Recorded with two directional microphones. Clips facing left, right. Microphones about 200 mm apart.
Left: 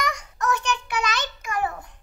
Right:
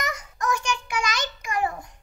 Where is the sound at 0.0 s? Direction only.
5° right (ahead or behind).